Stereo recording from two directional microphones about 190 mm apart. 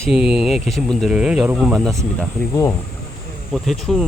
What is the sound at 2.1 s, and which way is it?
Speech, 15° left (ahead or behind).